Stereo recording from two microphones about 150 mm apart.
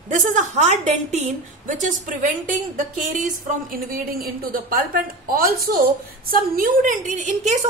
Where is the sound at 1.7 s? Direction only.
60° right (ahead or behind).